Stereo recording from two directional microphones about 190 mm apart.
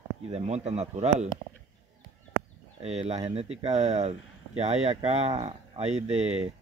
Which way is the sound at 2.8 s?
35° right (ahead or behind).